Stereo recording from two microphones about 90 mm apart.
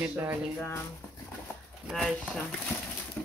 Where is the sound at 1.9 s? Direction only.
5° left (ahead or behind).